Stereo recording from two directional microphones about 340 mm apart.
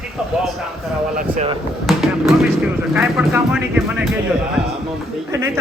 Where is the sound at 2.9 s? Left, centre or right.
Centre.